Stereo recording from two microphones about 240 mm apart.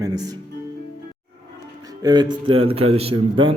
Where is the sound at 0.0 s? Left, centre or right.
Centre.